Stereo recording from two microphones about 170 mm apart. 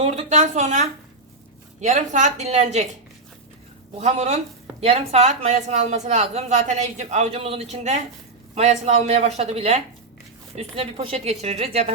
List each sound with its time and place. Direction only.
0.0 s a woman's voice: 40° right (ahead or behind)
3.9 s a woman's voice: 40° right (ahead or behind)